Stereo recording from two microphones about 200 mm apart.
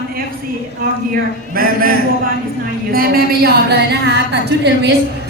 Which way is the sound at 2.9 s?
50° right (ahead or behind).